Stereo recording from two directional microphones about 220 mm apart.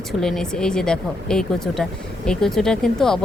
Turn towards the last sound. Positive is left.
turn(degrees=0)  # may be behind; listen again after turning